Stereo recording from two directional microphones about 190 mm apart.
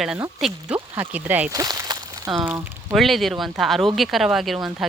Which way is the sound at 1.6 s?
20° right (ahead or behind).